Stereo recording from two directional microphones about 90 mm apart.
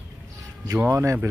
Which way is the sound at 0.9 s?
35° right (ahead or behind).